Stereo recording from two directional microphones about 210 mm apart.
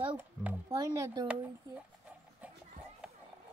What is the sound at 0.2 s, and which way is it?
Speech, 10° right (ahead or behind).